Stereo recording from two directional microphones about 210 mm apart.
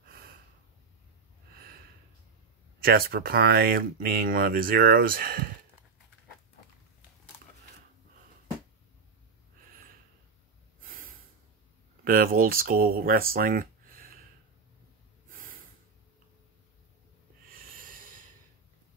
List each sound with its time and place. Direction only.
2.8 s speech: 45° right (ahead or behind)
10.8 s snort: 40° right (ahead or behind)
12.0 s speech: 45° right (ahead or behind)
15.2 s snort: 40° right (ahead or behind)
17.5 s snort: 45° right (ahead or behind)